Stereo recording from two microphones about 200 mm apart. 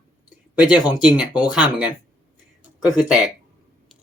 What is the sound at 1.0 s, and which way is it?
Speech, 5° right (ahead or behind).